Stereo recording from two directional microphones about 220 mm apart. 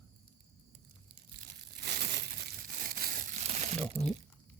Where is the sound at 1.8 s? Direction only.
50° right (ahead or behind).